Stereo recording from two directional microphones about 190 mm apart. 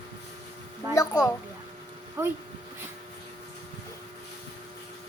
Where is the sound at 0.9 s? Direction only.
15° left (ahead or behind).